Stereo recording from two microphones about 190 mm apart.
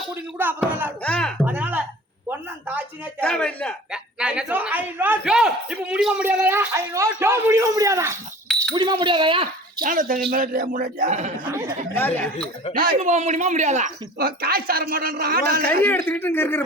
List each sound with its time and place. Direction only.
0.3 s a woman's voice: 10° right (ahead or behind)
1.0 s speech: 5° left (ahead or behind)
1.5 s a sound: 10° right (ahead or behind)
3.2 s a woman's voice: 5° left (ahead or behind); by 9.8 s 25° right (ahead or behind)
9.8 s speech: 45° right (ahead or behind)
11.9 s speech: 10° left (ahead or behind)
12.7 s speech: 50° right (ahead or behind)
13.0 s speech: 35° right (ahead or behind); by 15.6 s 55° right (ahead or behind)
15.8 s speech: 10° left (ahead or behind)